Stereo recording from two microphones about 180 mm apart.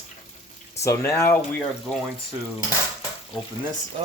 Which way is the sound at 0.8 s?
15° left (ahead or behind).